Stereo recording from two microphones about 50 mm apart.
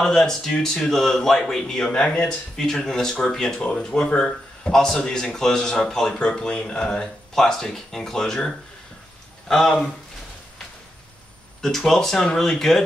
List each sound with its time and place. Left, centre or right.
0.0 s speech: centre
6.3 s speech: centre
11.6 s speech: centre